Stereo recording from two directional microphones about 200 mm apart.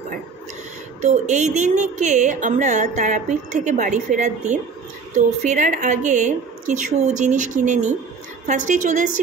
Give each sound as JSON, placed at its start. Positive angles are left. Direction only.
{"t": 1.0, "sound": "a woman's voice", "side_deg": -35}